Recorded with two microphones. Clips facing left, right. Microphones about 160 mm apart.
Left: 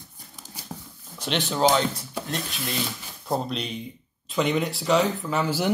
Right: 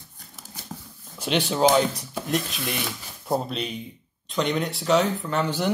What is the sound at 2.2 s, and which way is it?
Speech, 15° right (ahead or behind).